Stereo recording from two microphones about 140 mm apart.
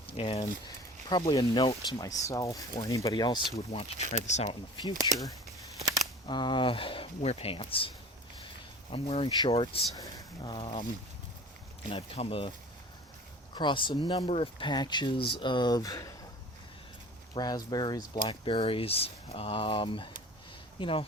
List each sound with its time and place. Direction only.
0.1 s speech: 40° left (ahead or behind)
1.0 s speech: 30° left (ahead or behind)
3.7 s speech: 50° left (ahead or behind)
5.1 s speech: 30° left (ahead or behind)
6.2 s speech: 35° left (ahead or behind)
9.9 s speech: 25° left (ahead or behind)
11.9 s speech: 45° left (ahead or behind)
13.5 s speech: 35° left (ahead or behind)
17.3 s speech: 30° left (ahead or behind)